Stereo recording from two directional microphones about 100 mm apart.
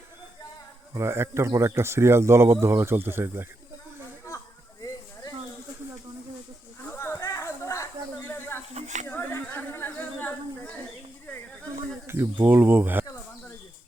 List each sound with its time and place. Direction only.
0.9 s speech: 25° right (ahead or behind)
6.8 s a sound: 25° left (ahead or behind)
12.0 s speech: 25° right (ahead or behind)